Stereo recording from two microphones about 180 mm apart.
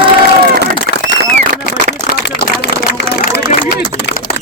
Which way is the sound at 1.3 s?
45° right (ahead or behind).